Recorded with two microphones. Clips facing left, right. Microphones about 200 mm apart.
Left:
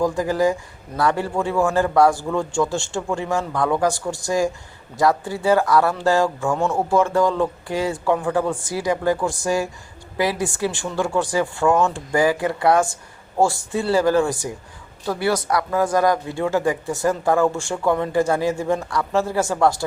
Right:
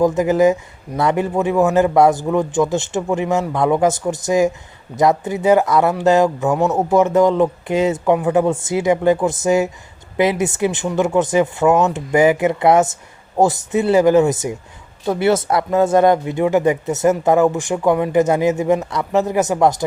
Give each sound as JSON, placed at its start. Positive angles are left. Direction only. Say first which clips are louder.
{"t": 0.0, "sound": "speech", "louder": "right 6 dB", "side_deg": -20}